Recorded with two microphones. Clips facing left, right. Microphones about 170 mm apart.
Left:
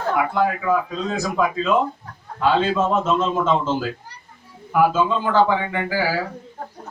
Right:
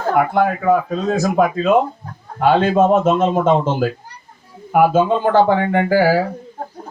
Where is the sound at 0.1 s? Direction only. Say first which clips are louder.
Right 5 dB; 55° right (ahead or behind).